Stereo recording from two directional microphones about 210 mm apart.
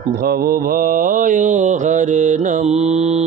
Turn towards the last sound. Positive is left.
turn(degrees=-30)  # may be behind; listen again after turning